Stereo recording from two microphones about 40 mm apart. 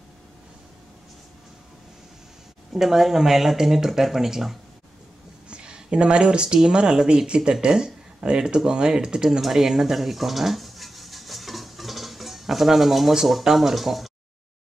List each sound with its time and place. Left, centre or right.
2.7 s speech: centre
5.5 s speech: right
9.4 s a sound: centre
13.3 s speech: centre